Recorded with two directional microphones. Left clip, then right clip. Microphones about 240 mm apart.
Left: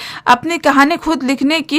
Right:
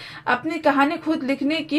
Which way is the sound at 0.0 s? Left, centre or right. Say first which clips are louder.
Left 10 dB; left.